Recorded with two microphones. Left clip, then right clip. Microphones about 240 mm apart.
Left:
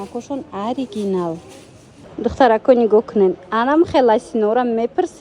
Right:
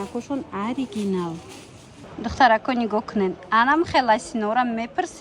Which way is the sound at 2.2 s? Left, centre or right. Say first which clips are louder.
Left 5 dB; right.